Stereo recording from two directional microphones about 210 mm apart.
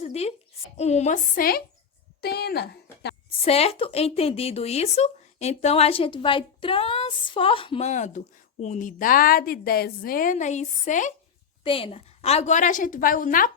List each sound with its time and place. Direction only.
0.0 s a sound: 30° left (ahead or behind)
0.8 s a woman's voice: 30° left (ahead or behind); by 3.2 s 50° left (ahead or behind)
3.4 s a woman's voice: 30° left (ahead or behind)
11.6 s a woman's voice: 25° left (ahead or behind)